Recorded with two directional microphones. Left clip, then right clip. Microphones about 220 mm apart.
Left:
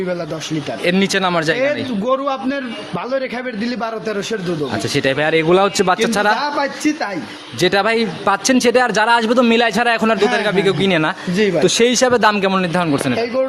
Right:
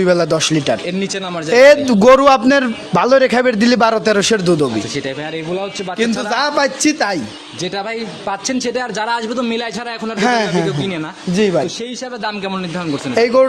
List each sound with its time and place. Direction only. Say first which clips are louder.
0.0 s a man's voice: right 9 dB; 50° right (ahead or behind)
0.9 s a man's voice: left 6 dB; 35° left (ahead or behind)
1.5 s a man's voice: right 11 dB; 50° right (ahead or behind)
5.0 s a man's voice: left 8 dB; 35° left (ahead or behind)
6.3 s a man's voice: right 3 dB; 50° right (ahead or behind)
7.6 s a man's voice: left 7 dB; 35° left (ahead or behind)
13.1 s a man's voice: right 12 dB; 50° right (ahead or behind)